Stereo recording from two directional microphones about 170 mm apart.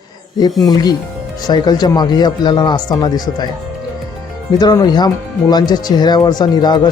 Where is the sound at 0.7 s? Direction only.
25° left (ahead or behind).